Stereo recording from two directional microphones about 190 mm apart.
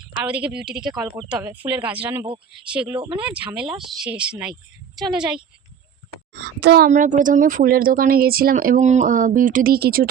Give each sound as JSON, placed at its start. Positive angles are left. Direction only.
{"t": 0.0, "sound": "speech", "side_deg": -5}
{"t": 3.0, "sound": "speech", "side_deg": -25}
{"t": 3.2, "sound": "speech", "side_deg": -5}
{"t": 6.3, "sound": "speech", "side_deg": -60}